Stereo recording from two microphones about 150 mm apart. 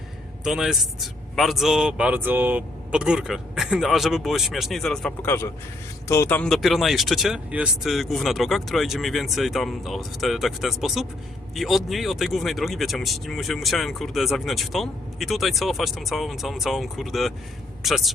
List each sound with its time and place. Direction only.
0.4 s speech: 5° right (ahead or behind)
5.2 s speech: 15° left (ahead or behind)
6.5 s speech: centre (ahead or behind)